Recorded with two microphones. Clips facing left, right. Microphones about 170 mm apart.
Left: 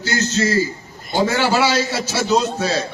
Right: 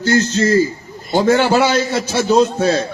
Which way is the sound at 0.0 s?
55° right (ahead or behind).